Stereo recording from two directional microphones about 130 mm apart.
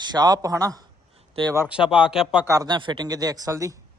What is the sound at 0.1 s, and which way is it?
Speech, 30° right (ahead or behind).